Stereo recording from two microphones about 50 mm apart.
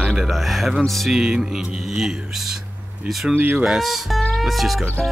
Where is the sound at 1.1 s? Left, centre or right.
Centre.